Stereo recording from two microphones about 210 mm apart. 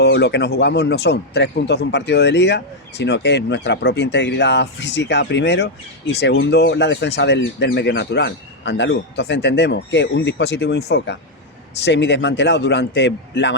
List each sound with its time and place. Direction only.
0.0 s speech: 50° left (ahead or behind)